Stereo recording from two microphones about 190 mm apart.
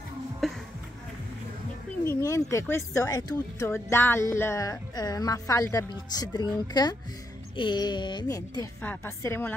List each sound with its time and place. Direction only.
0.4 s music: centre (ahead or behind)
2.0 s a sound: 15° left (ahead or behind)
2.5 s speech: 15° left (ahead or behind)